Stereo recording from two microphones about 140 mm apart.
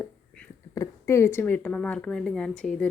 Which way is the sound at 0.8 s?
20° left (ahead or behind).